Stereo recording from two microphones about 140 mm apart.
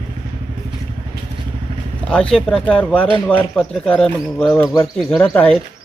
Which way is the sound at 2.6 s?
10° left (ahead or behind).